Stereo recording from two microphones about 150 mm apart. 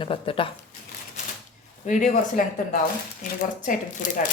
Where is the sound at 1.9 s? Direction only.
55° left (ahead or behind).